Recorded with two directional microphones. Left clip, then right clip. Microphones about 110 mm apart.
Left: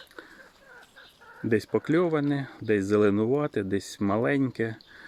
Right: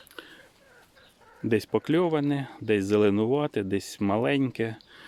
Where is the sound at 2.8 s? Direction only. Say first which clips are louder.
Even; 25° right (ahead or behind).